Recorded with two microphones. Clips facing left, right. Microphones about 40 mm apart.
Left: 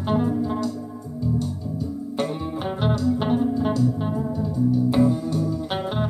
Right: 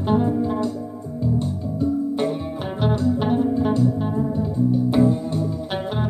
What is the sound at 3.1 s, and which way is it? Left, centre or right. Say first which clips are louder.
Music: right 2 dB; centre.